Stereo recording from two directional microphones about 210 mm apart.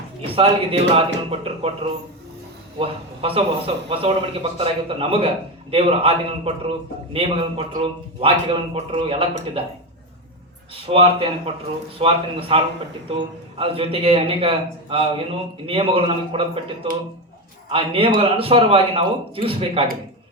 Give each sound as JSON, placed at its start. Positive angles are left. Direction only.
{"t": 0.3, "sound": "a man's voice", "side_deg": -25}
{"t": 10.8, "sound": "a man's voice", "side_deg": -25}